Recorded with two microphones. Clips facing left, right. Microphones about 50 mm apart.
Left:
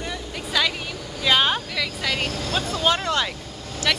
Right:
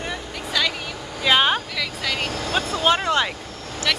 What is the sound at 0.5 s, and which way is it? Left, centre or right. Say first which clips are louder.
Vehicle: even; centre.